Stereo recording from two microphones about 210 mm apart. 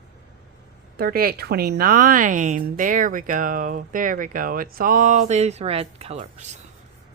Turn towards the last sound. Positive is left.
turn(degrees=-30)  # may be behind; listen again after turning